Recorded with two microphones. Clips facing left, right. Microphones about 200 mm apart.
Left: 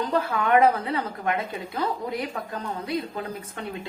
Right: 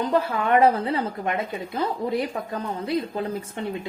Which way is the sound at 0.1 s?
30° right (ahead or behind).